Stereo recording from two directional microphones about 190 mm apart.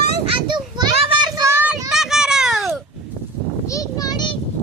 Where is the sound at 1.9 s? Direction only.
Centre (ahead or behind).